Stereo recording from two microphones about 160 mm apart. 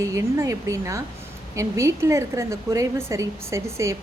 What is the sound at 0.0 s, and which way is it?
A woman's voice, 20° right (ahead or behind).